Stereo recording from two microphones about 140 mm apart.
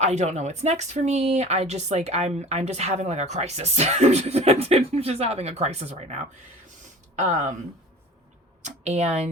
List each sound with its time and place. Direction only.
0.0 s speech: 55° right (ahead or behind)
8.6 s a woman's voice: 55° right (ahead or behind)